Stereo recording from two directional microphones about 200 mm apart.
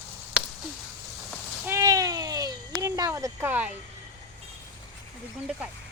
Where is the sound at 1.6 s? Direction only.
15° right (ahead or behind).